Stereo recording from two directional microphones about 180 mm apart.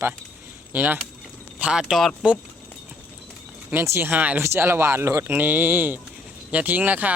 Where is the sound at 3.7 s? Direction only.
10° right (ahead or behind).